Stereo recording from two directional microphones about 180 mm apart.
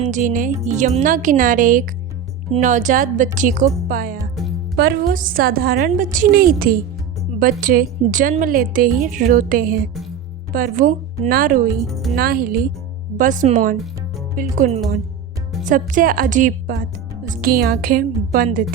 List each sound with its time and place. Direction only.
0.0 s a woman's voice: 45° right (ahead or behind)
11.8 s speech: centre (ahead or behind)
12.1 s a woman's voice: 55° right (ahead or behind)